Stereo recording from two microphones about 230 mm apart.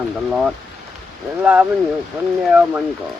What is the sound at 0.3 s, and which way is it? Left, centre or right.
Speech, centre.